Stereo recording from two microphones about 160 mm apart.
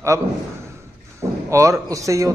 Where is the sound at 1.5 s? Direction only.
20° right (ahead or behind).